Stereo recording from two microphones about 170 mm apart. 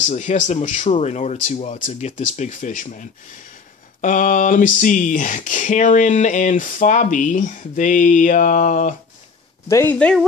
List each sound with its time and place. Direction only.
0.1 s speech: 45° left (ahead or behind)
9.7 s speech: 15° left (ahead or behind)